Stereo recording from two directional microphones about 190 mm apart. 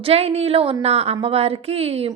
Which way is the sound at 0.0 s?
30° right (ahead or behind).